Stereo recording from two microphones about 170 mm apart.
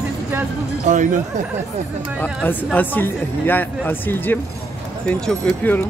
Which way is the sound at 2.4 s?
10° left (ahead or behind).